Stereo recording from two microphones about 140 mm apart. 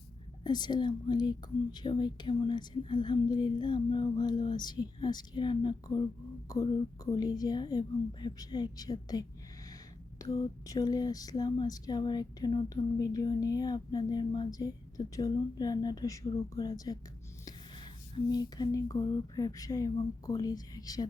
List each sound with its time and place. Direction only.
0.4 s speech: 30° left (ahead or behind)
18.3 s speech: 30° left (ahead or behind)